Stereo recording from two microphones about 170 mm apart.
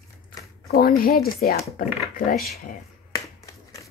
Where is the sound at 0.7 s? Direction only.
60° left (ahead or behind).